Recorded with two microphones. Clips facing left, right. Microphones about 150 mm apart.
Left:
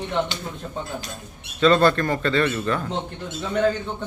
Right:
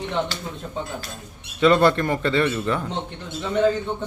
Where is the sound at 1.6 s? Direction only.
20° right (ahead or behind).